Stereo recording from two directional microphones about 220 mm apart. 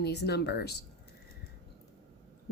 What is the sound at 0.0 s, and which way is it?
Speech, 50° left (ahead or behind).